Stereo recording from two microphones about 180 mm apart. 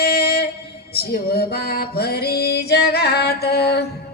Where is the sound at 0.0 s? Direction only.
60° left (ahead or behind).